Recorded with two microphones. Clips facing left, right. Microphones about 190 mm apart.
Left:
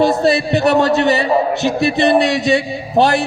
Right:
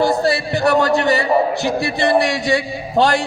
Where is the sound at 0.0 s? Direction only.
20° left (ahead or behind).